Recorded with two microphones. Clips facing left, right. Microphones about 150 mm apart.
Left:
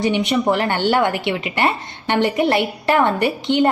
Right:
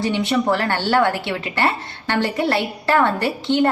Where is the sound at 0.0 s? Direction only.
15° left (ahead or behind).